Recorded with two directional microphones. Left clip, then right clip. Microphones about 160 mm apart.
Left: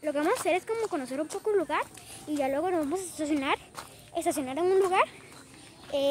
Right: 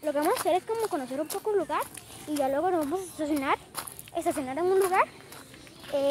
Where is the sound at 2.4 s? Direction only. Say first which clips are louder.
Right 2 dB; 15° left (ahead or behind); by 5.1 s 35° left (ahead or behind).